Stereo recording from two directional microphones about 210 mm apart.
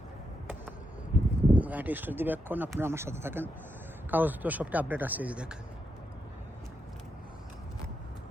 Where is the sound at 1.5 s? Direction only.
10° right (ahead or behind).